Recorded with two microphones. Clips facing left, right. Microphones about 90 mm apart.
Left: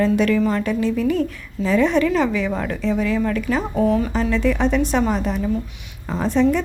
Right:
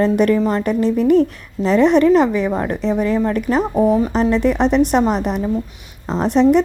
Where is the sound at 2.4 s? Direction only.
35° right (ahead or behind).